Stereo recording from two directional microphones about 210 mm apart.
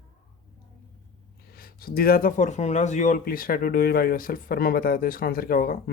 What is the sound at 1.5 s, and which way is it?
Speech, 45° left (ahead or behind).